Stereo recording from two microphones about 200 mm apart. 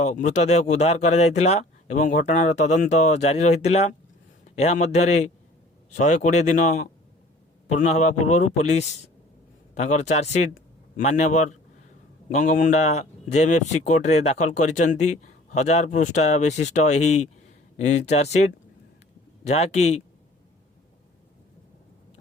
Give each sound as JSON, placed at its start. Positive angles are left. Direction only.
{"t": 0.0, "sound": "speech", "side_deg": 35}
{"t": 7.8, "sound": "speech", "side_deg": 35}
{"t": 19.5, "sound": "speech", "side_deg": 35}